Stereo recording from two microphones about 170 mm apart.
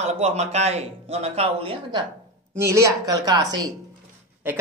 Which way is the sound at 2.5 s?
15° right (ahead or behind).